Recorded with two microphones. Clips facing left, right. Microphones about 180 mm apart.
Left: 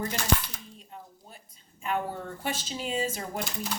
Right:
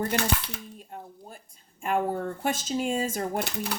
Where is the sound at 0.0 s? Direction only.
60° right (ahead or behind).